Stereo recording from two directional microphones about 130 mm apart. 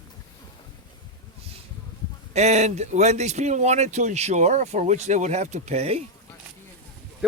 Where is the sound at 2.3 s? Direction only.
60° right (ahead or behind).